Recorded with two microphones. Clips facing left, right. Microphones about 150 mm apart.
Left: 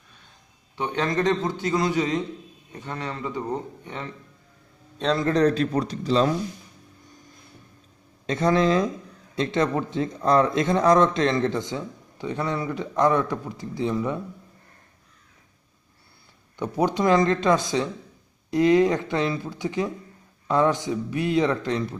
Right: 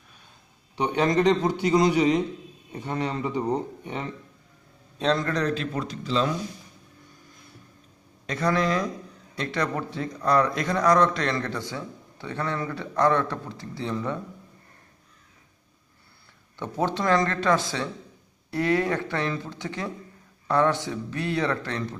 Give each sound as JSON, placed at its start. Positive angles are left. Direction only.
{"t": 0.7, "sound": "a man's voice", "side_deg": -15}
{"t": 4.9, "sound": "a man's voice", "side_deg": 0}
{"t": 5.2, "sound": "speech", "side_deg": 35}
{"t": 8.3, "sound": "speech", "side_deg": 25}
{"t": 16.5, "sound": "speech", "side_deg": 15}